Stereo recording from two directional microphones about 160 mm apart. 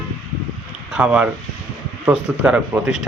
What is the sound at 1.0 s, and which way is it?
Speech, 5° right (ahead or behind).